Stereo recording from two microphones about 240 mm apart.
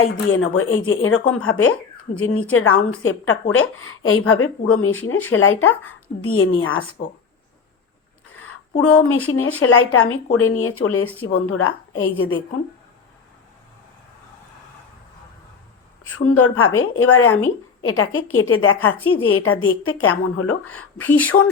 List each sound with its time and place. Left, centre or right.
0.0 s speech: left
9.0 s speech: left
16.1 s speech: left
21.2 s speech: centre